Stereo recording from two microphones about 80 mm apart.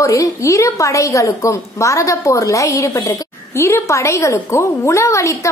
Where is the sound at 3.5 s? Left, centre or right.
Left.